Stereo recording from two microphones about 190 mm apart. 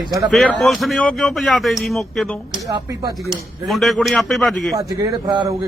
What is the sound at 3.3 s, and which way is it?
Speech, centre (ahead or behind).